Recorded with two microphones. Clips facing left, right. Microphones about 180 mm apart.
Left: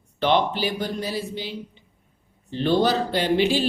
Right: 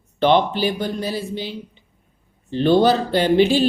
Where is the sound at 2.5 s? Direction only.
30° right (ahead or behind).